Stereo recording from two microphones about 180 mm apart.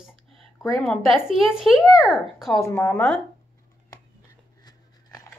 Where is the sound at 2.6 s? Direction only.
15° left (ahead or behind).